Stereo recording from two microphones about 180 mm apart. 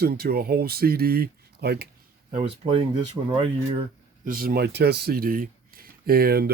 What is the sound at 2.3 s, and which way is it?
Speech, 35° right (ahead or behind).